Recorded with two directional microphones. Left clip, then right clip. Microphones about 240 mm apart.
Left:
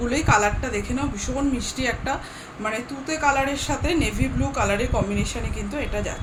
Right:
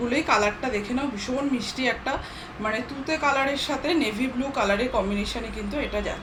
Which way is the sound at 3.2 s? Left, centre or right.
Centre.